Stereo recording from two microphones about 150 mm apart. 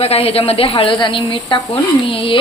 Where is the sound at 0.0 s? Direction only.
40° left (ahead or behind).